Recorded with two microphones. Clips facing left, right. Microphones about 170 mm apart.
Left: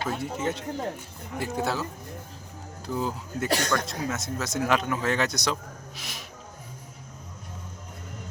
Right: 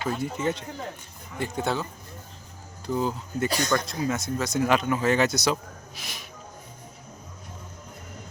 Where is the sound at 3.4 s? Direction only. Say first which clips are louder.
Even; 70° left (ahead or behind).